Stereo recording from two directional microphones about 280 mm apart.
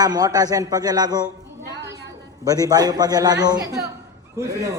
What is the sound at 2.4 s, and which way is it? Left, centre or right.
A man's voice, centre.